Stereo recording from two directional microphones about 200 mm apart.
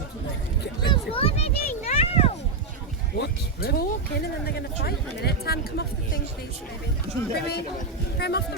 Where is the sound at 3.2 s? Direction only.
50° left (ahead or behind).